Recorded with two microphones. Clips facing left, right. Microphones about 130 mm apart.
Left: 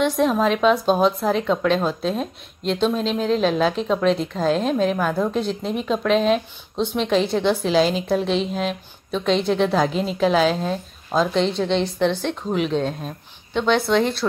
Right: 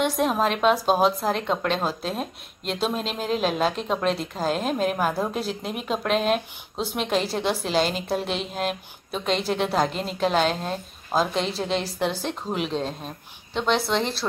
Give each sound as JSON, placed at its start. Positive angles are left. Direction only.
{"t": 0.0, "sound": "speech", "side_deg": 0}